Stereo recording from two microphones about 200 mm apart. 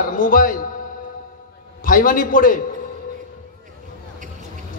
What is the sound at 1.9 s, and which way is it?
Speech, 45° left (ahead or behind).